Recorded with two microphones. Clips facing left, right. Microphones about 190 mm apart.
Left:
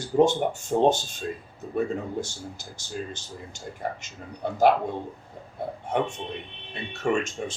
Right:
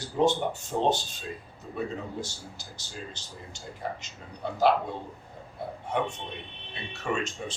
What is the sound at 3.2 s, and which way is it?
Speech, 50° left (ahead or behind).